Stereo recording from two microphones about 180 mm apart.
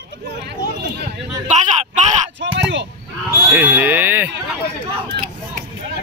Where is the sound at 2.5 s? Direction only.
80° right.